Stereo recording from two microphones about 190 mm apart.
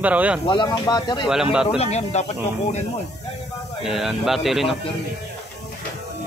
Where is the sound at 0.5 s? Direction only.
25° left (ahead or behind).